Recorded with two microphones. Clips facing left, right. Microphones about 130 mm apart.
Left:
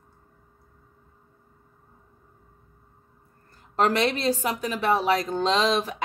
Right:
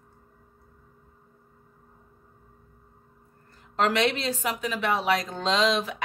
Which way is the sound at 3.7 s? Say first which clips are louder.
Left 1 dB; 40° left (ahead or behind).